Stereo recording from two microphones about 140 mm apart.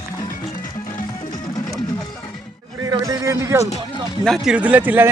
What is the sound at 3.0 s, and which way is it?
Speech, 25° right (ahead or behind).